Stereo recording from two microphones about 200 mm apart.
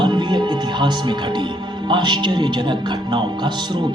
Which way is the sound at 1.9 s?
20° right (ahead or behind).